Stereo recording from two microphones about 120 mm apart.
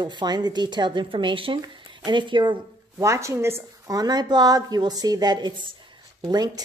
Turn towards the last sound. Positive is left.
turn(degrees=-35)  # may be behind; listen again after turning